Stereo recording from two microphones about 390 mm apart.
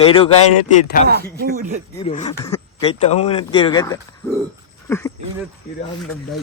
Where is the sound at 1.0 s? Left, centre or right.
Right.